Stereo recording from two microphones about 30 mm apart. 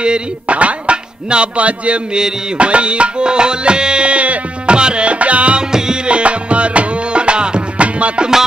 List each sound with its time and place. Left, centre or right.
0.5 s speech: right
2.5 s tabla: right
4.7 s music: right
5.6 s music: right
6.0 s music: right
7.7 s music: right